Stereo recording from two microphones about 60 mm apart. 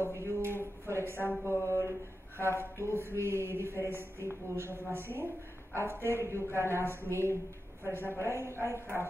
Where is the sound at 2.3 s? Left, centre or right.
Right.